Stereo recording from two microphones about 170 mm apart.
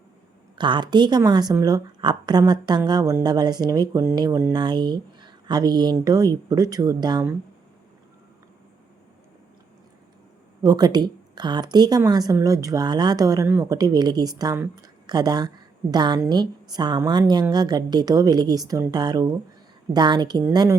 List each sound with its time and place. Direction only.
0.6 s a woman's voice: 25° right (ahead or behind)
10.6 s a woman's voice: 20° right (ahead or behind)